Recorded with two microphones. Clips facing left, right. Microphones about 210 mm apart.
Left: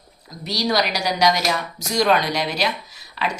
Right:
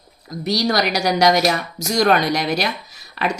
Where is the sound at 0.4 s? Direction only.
45° right (ahead or behind).